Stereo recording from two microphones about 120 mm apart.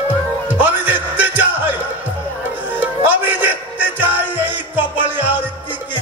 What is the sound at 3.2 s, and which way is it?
Music, 15° right (ahead or behind).